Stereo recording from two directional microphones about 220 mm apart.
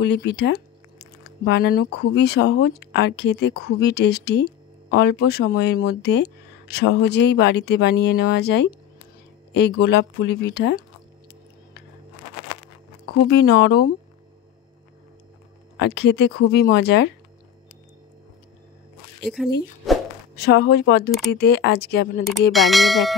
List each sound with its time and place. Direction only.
0.0 s speech: 50° left (ahead or behind)
13.3 s speech: 45° left (ahead or behind)
15.8 s speech: 50° left (ahead or behind)
19.2 s speech: centre (ahead or behind)
20.4 s speech: 50° left (ahead or behind)
22.5 s speech: centre (ahead or behind)